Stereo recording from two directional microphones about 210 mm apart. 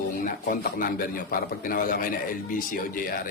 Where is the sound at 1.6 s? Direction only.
40° left (ahead or behind).